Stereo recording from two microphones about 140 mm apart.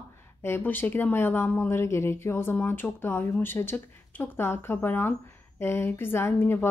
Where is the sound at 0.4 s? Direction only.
15° left (ahead or behind).